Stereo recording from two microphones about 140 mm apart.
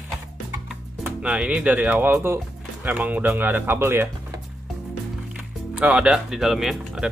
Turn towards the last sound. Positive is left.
turn(degrees=0)  # may be behind; listen again after turning